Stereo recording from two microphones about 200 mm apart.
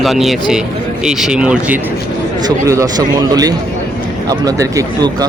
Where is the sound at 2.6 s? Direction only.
15° right (ahead or behind).